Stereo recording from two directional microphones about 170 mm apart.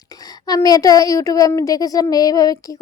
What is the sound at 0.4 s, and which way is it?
A woman's voice, 20° left (ahead or behind).